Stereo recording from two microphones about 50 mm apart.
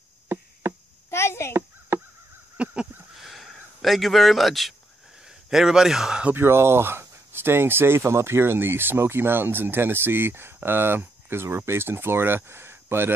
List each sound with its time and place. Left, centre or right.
0.3 s chop: right
1.1 s a sound: left
1.9 s honk: right
2.5 s honk: right
3.2 s a sound: centre
5.2 s a man's voice: centre
6.3 s speech: right